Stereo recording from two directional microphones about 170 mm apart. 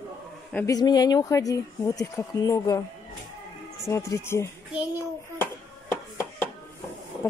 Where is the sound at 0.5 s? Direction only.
20° left (ahead or behind).